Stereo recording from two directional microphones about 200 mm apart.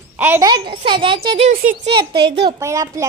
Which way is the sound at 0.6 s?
25° right (ahead or behind).